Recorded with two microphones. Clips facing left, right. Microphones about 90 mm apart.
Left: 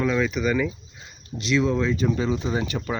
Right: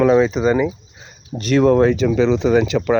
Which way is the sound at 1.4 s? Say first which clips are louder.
Right 9 dB; 55° right (ahead or behind).